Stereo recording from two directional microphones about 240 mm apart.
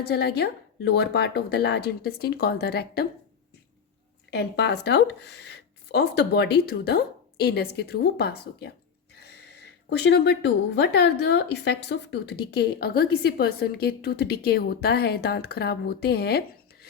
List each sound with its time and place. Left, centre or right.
0.1 s speech: left
4.3 s speech: left
9.1 s a sound: left
10.0 s a woman's voice: left